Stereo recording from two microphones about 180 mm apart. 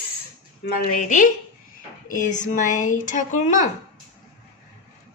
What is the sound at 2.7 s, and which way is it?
A woman's voice, 45° left (ahead or behind).